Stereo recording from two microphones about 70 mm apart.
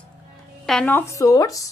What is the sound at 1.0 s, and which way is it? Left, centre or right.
Speech, left.